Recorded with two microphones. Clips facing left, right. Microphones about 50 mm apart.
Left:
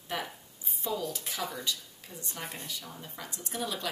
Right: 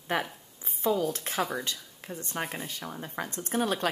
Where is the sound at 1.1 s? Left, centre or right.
Right.